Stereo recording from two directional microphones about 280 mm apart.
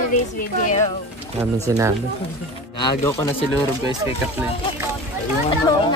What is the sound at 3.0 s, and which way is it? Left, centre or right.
Speech, centre.